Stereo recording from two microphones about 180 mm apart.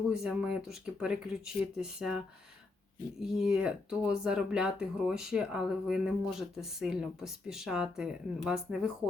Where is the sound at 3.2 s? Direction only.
Centre (ahead or behind).